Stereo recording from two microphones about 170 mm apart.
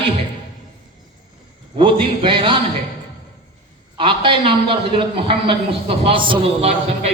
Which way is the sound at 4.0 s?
30° right (ahead or behind).